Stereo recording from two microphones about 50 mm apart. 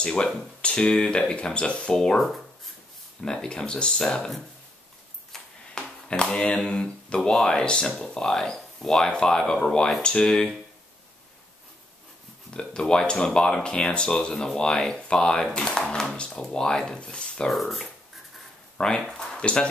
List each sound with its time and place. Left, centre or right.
0.0 s speech: centre
2.1 s speech: centre
3.2 s speech: centre
5.3 s a sound: centre
6.3 s speech: left
12.5 s speech: centre
17.5 s speech: centre
18.8 s speech: centre